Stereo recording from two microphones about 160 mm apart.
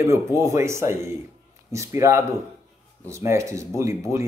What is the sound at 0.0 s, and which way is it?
Speech, 20° right (ahead or behind).